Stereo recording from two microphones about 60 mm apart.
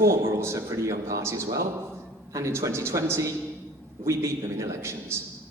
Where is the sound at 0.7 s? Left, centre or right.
Right.